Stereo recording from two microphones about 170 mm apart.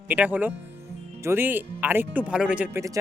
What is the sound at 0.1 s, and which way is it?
Speech, 10° right (ahead or behind).